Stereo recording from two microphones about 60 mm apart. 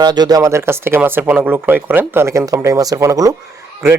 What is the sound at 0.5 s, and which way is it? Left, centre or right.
Speech, right.